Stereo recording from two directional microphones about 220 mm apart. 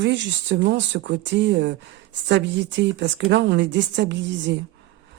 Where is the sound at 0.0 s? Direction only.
55° right (ahead or behind).